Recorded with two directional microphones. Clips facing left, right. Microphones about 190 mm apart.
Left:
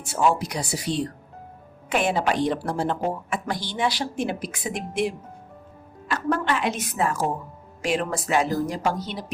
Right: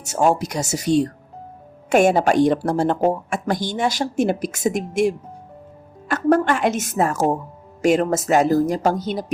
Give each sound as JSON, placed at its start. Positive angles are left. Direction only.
{"t": 0.0, "sound": "a woman's voice", "side_deg": -45}